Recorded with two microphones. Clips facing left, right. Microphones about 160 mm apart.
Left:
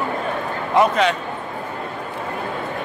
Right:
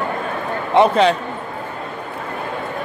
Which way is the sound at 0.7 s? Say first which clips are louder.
Right 3 dB; 30° right (ahead or behind).